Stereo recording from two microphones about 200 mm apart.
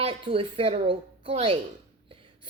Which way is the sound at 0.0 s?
25° right (ahead or behind).